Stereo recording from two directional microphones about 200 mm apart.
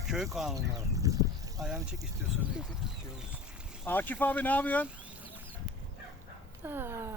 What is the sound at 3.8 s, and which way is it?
Speech, 10° left (ahead or behind).